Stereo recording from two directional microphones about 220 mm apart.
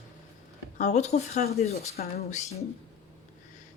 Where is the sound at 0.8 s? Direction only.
30° left (ahead or behind).